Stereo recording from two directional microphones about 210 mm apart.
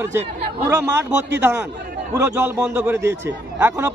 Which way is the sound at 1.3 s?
10° right (ahead or behind).